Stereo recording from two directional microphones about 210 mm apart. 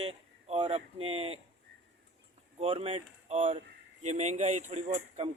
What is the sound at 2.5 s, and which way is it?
Speech, 30° right (ahead or behind).